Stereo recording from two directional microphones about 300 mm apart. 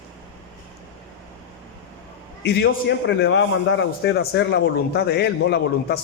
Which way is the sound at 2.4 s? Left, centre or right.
Left.